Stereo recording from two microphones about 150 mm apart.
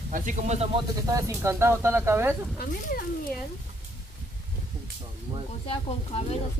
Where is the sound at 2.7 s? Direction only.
65° left (ahead or behind).